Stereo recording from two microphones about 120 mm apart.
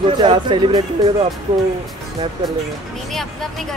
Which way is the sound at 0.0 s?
45° right (ahead or behind).